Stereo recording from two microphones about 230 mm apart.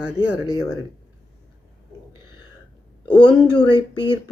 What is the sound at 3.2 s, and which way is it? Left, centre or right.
Speech, centre.